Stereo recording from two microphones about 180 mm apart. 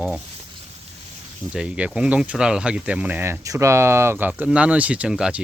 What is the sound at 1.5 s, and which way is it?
Speech, 5° right (ahead or behind).